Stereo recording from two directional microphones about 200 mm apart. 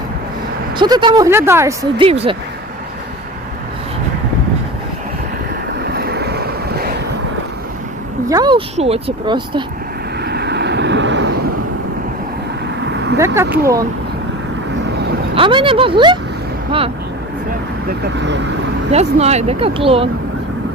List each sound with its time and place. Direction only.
0.8 s speech: 25° right (ahead or behind)
2.0 s speech: 30° right (ahead or behind)
5.8 s waves: 55° right (ahead or behind)
8.3 s speech: 20° right (ahead or behind)
10.2 s vehicle: 55° right (ahead or behind)
13.1 s speech: 15° right (ahead or behind)
15.4 s speech: 25° right (ahead or behind)
17.8 s speech: 60° right (ahead or behind)
18.9 s speech: 35° right (ahead or behind)